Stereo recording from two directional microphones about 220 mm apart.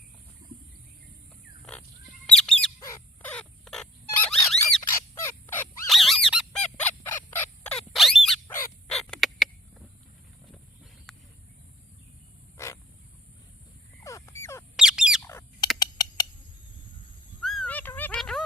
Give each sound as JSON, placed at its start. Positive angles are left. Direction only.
{"t": 2.2, "sound": "bird", "side_deg": 0}
{"t": 2.8, "sound": "a sound", "side_deg": 10}
{"t": 4.8, "sound": "bird", "side_deg": 10}
{"t": 5.9, "sound": "honk", "side_deg": 0}
{"t": 7.9, "sound": "bird", "side_deg": 0}
{"t": 11.1, "sound": "vehicle", "side_deg": 0}
{"t": 12.5, "sound": "a sound", "side_deg": 10}
{"t": 14.0, "sound": "crow", "side_deg": 15}
{"t": 14.8, "sound": "bird", "side_deg": -5}
{"t": 15.2, "sound": "bird", "side_deg": 10}
{"t": 15.8, "sound": "a sound", "side_deg": 20}
{"t": 17.4, "sound": "a sound", "side_deg": 0}